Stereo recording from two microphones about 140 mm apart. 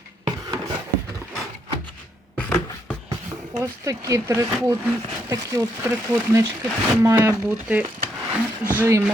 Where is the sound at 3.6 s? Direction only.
20° right (ahead or behind).